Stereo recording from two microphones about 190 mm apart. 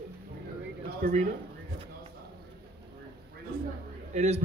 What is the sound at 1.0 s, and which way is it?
Speech, 45° right (ahead or behind).